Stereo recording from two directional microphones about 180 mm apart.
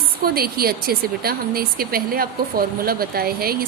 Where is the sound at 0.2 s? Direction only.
55° right (ahead or behind).